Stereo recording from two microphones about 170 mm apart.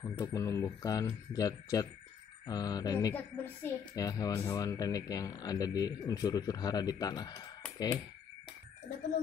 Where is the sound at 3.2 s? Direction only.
10° left (ahead or behind).